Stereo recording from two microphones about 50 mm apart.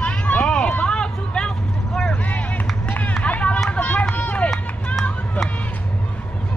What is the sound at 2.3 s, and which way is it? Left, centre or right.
Run, left.